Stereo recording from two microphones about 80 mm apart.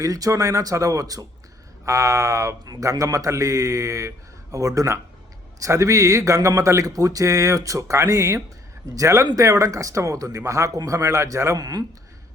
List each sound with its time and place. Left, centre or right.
0.0 s speech: right
11.6 s speech: right